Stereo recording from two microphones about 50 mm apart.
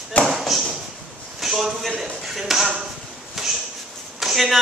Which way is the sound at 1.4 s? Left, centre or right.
Centre.